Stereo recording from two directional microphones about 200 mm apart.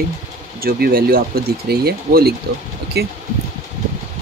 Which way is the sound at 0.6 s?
50° right (ahead or behind).